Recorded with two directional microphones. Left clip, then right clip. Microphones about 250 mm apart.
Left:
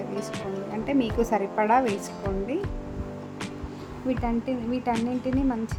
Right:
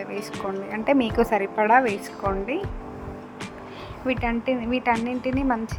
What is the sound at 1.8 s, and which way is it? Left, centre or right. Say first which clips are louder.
Speech: right 3 dB; centre.